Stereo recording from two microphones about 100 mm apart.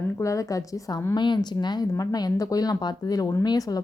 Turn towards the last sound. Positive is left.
turn(degrees=40)  # may be behind; listen again after turning